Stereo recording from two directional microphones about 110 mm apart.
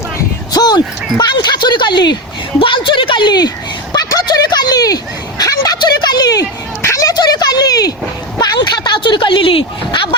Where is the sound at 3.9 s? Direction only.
35° left (ahead or behind).